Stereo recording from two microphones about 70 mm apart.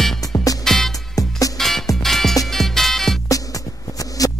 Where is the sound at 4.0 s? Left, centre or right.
Left.